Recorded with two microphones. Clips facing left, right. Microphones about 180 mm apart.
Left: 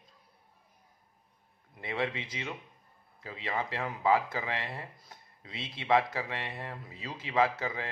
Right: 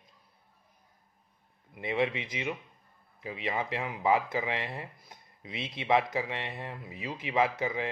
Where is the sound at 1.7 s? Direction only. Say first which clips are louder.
Right 4 dB; 20° right (ahead or behind).